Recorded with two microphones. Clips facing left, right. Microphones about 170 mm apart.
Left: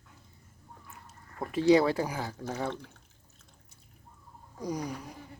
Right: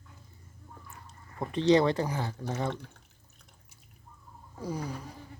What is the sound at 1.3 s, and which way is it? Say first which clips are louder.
Speech: left 1 dB; centre (ahead or behind).